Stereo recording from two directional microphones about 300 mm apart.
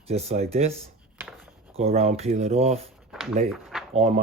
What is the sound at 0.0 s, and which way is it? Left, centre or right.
Speech, right.